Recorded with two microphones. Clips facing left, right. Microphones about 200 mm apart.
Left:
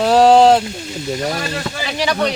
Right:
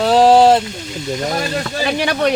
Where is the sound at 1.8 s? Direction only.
55° right (ahead or behind).